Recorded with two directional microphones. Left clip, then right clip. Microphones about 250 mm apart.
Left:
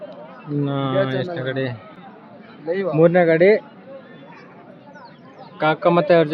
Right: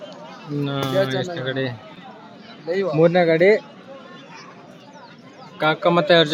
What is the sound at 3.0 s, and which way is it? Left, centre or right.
Speech, centre.